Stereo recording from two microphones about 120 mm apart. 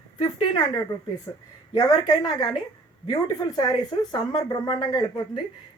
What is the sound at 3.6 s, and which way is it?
Speech, 35° left (ahead or behind).